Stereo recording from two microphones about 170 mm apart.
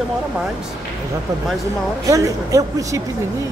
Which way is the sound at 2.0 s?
20° right (ahead or behind).